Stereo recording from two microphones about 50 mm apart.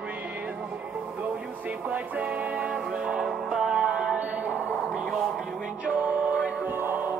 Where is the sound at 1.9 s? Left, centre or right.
Right.